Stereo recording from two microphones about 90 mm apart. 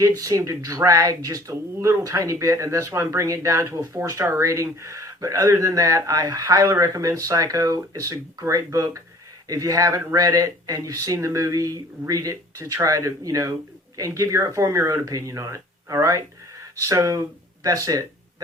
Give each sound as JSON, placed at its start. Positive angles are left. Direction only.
{"t": 0.2, "sound": "speech", "side_deg": -40}